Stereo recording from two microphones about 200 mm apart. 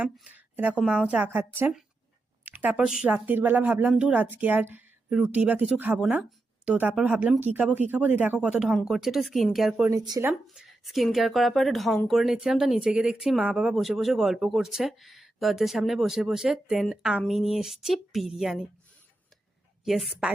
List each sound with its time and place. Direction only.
0.0 s a woman's voice: 10° right (ahead or behind)
9.9 s speech: 20° right (ahead or behind)
10.2 s speech: 5° right (ahead or behind)
19.8 s speech: centre (ahead or behind)